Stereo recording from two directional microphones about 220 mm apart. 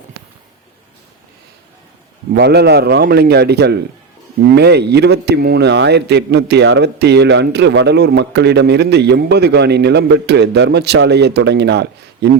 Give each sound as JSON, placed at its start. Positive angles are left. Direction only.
{"t": 2.3, "sound": "a man's voice", "side_deg": -50}